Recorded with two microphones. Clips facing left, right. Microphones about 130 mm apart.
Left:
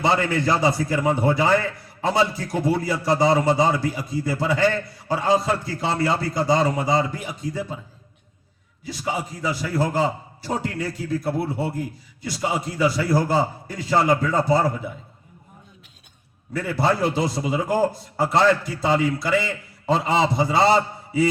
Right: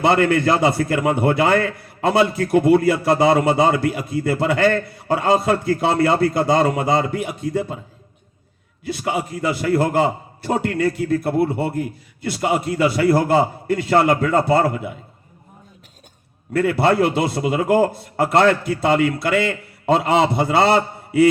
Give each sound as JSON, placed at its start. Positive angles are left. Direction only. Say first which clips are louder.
{"t": 0.0, "sound": "a man's voice", "louder": "right 5 dB", "side_deg": -60}
{"t": 8.8, "sound": "a man's voice", "louder": "right 4 dB", "side_deg": -60}
{"t": 16.5, "sound": "a man's voice", "louder": "right 5 dB", "side_deg": -65}